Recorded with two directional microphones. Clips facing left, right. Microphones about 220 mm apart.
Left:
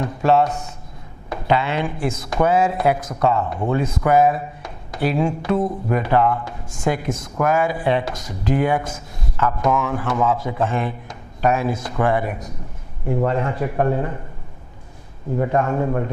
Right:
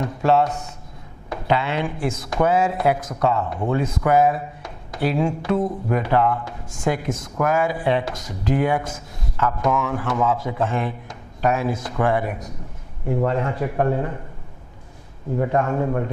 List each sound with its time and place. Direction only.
0.0 s speech: 15° left (ahead or behind)
15.4 s a man's voice: 20° left (ahead or behind)